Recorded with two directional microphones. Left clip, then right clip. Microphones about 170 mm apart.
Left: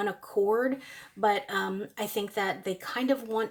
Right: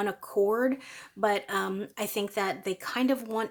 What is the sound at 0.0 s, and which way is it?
Speech, 35° right (ahead or behind).